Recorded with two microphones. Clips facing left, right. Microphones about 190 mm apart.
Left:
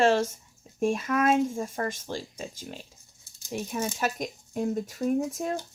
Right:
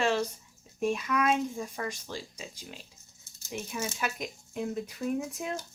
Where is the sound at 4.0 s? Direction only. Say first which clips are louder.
Left 5 dB; 45° left (ahead or behind).